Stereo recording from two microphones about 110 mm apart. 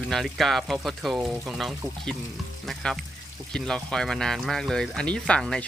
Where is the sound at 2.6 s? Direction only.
5° left (ahead or behind).